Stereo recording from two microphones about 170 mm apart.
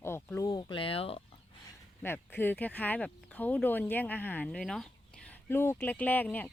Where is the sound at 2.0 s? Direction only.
10° left (ahead or behind).